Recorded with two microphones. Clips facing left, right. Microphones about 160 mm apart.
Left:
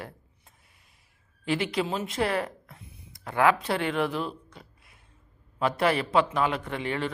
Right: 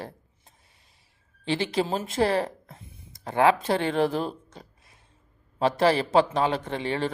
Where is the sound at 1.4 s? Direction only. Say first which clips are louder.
Right 2 dB; 30° right (ahead or behind).